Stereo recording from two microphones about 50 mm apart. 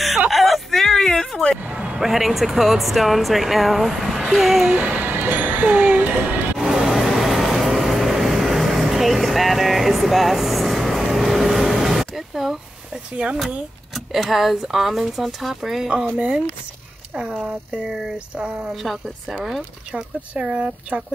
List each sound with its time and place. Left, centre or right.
0.3 s vehicle: centre
1.7 s speech: right
2.0 s speech: centre
4.6 s speech: right
6.6 s vehicle: centre
13.1 s a woman's voice: right
13.9 s speech: centre
17.3 s a woman's voice: right
17.6 s a woman's voice: centre
18.8 s speech: centre
19.9 s speech: centre